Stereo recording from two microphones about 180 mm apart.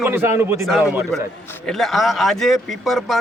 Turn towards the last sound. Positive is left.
turn(degrees=0)  # may be behind; listen again after turning